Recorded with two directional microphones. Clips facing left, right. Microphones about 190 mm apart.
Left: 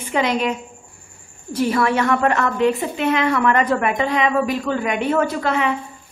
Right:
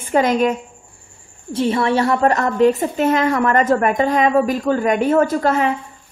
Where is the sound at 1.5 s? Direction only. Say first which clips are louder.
Right 1 dB; 25° right (ahead or behind); by 5.7 s 40° right (ahead or behind).